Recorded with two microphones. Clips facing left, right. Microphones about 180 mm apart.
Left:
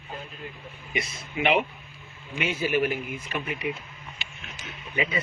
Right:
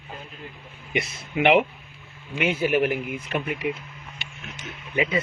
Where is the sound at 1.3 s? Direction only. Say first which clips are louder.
Right 5 dB; 65° right (ahead or behind).